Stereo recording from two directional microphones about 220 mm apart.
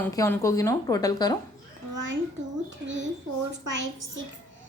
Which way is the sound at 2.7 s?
55° right (ahead or behind).